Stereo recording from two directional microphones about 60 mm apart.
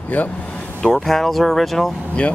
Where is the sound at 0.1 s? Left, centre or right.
Left.